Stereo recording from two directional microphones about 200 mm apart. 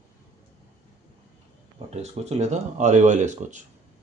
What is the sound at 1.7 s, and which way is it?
Speech, 35° right (ahead or behind).